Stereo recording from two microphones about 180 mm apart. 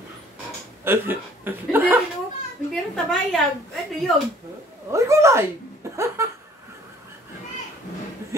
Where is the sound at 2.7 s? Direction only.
Centre (ahead or behind).